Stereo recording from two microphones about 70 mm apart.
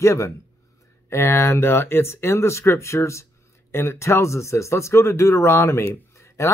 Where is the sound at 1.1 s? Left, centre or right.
Left.